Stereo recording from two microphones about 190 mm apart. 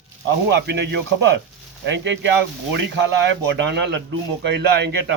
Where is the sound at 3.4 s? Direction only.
60° right (ahead or behind).